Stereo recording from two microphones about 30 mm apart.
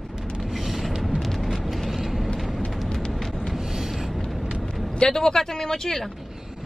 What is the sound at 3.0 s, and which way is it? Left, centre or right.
Vehicle, centre.